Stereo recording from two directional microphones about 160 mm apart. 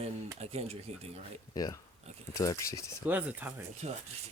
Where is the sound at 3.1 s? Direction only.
10° right (ahead or behind).